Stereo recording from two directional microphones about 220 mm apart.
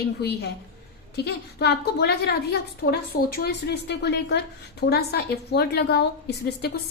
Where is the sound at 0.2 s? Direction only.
45° left (ahead or behind).